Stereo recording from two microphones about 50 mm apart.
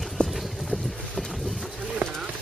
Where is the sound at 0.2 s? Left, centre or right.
Left.